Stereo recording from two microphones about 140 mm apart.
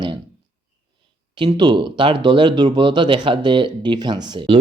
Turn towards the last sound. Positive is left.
turn(degrees=-35)  # may be behind; listen again after turning